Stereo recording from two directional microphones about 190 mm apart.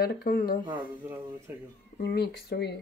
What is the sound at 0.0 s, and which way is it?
Speech, 50° left (ahead or behind).